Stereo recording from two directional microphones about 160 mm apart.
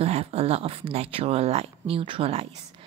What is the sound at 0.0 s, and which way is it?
Speech, 40° right (ahead or behind).